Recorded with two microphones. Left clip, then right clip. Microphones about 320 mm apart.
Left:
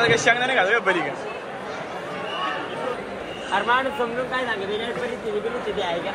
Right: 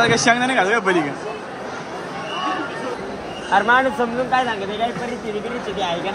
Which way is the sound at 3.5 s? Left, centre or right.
Right.